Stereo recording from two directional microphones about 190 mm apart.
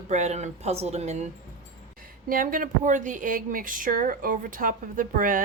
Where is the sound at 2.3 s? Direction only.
45° right (ahead or behind).